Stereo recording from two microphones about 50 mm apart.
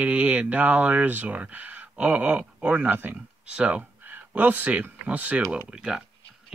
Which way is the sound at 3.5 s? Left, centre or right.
Right.